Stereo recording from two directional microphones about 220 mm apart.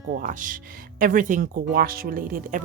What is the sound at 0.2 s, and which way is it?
Speech, 35° right (ahead or behind).